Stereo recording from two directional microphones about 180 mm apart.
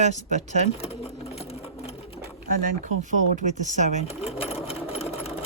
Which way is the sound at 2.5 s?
50° right (ahead or behind).